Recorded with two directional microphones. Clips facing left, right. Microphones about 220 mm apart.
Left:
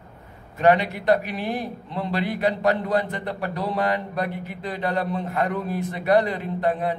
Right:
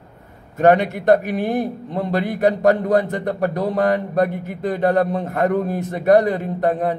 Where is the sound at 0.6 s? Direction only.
45° right (ahead or behind).